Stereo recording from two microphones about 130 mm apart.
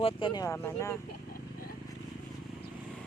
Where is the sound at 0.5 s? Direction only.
20° left (ahead or behind).